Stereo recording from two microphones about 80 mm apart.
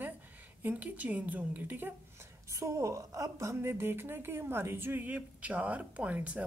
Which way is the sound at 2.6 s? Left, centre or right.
Right.